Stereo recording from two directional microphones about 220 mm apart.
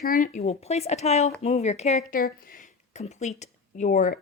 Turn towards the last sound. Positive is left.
turn(degrees=35)  # may be behind; listen again after turning